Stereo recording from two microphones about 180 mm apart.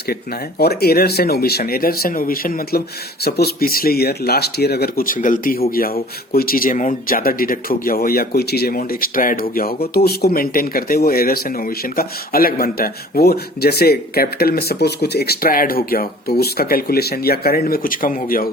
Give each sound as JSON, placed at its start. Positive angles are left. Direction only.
{"t": 0.6, "sound": "speech", "side_deg": 60}